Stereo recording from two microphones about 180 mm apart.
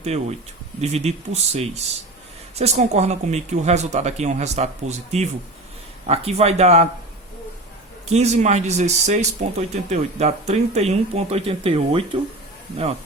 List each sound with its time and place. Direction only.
0.0 s speech: 35° right (ahead or behind)
8.1 s speech: 40° right (ahead or behind)